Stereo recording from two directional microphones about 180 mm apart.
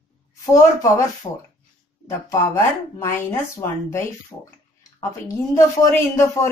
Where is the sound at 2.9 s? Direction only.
15° left (ahead or behind).